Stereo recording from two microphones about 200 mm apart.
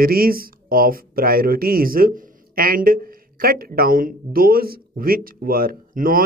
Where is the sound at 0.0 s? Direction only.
45° right (ahead or behind).